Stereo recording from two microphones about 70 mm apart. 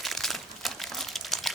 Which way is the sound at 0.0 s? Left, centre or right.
Centre.